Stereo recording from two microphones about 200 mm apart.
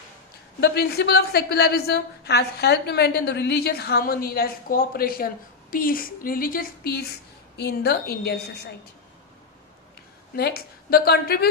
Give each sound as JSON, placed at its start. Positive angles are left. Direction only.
{"t": 0.6, "sound": "a woman's voice", "side_deg": 55}
{"t": 10.3, "sound": "a woman's voice", "side_deg": 50}